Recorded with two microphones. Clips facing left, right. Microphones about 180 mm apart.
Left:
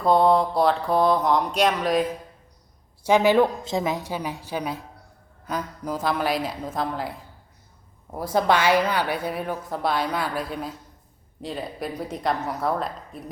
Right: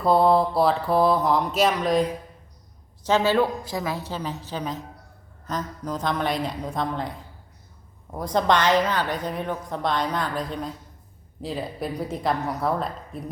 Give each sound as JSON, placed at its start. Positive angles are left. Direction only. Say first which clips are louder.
{"t": 0.0, "sound": "mantra", "louder": "even", "side_deg": 0}
{"t": 3.0, "sound": "a woman's voice", "louder": "left 3 dB", "side_deg": 15}
{"t": 5.5, "sound": "mantra", "louder": "left 1 dB", "side_deg": 10}
{"t": 8.1, "sound": "a woman's voice", "louder": "even", "side_deg": 5}
{"t": 11.4, "sound": "mantra", "louder": "right 1 dB", "side_deg": 0}